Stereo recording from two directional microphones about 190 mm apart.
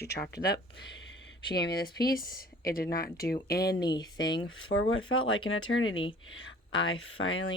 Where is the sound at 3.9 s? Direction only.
20° left (ahead or behind).